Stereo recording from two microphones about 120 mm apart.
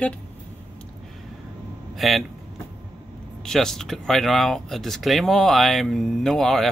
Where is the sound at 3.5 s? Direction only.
5° left (ahead or behind).